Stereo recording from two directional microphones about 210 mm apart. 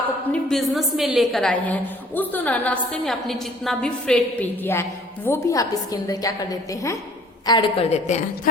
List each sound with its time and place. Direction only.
0.3 s a woman's voice: centre (ahead or behind); by 8.2 s 30° left (ahead or behind)